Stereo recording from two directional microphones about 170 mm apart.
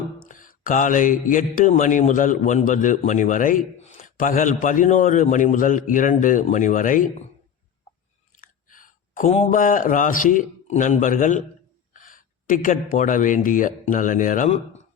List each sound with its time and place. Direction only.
0.2 s speech: 55° left (ahead or behind)
8.4 s a sound: 50° left (ahead or behind)
9.5 s speech: 50° left (ahead or behind)